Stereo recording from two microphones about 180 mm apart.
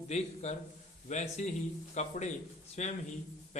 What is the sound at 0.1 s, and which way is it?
Speech, 40° left (ahead or behind).